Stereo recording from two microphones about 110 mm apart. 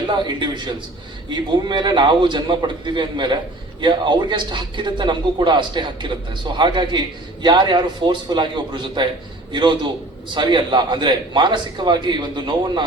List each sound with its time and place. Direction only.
0.1 s a man's voice: 45° right (ahead or behind)